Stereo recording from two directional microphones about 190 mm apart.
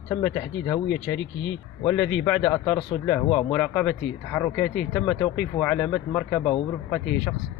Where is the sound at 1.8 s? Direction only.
5° left (ahead or behind).